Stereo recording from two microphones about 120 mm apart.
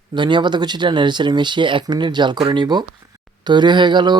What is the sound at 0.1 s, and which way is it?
Speech, 40° right (ahead or behind).